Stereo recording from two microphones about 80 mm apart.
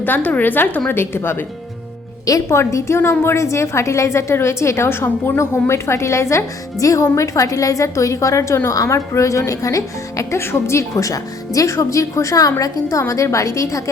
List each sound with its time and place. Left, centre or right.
0.0 s a woman's voice: left
2.2 s speech: left